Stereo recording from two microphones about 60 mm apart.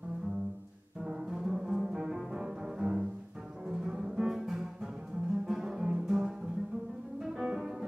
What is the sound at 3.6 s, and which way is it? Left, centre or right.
Double bass, centre.